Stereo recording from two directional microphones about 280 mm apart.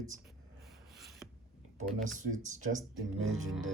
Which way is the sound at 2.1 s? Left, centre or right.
Right.